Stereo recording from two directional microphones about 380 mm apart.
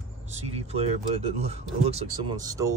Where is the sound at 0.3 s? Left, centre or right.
Centre.